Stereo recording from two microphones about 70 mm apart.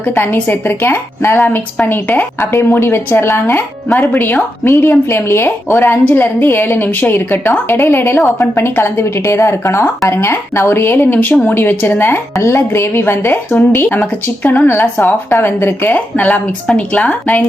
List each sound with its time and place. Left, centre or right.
0.0 s a woman's voice: left
4.6 s a woman's voice: left